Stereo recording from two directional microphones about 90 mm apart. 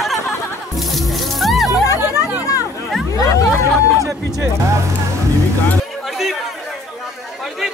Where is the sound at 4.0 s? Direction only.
35° right (ahead or behind).